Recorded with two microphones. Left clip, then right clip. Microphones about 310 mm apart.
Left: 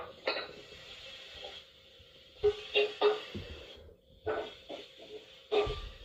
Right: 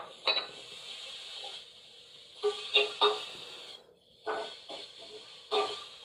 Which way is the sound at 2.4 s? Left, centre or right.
Centre.